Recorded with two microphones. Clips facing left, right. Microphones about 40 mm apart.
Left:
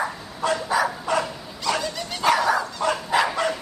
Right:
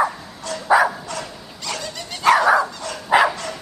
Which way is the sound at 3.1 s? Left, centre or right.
Centre.